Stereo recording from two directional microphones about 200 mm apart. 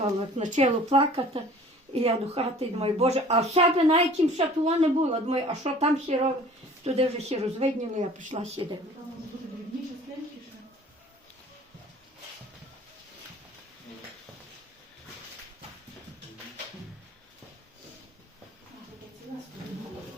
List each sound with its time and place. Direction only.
0.3 s a woman's voice: 35° right (ahead or behind)